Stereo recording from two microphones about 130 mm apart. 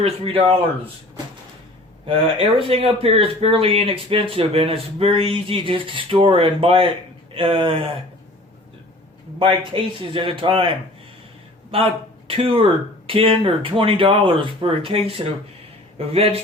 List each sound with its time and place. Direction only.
2.0 s speech: 45° right (ahead or behind)
9.4 s speech: 40° right (ahead or behind)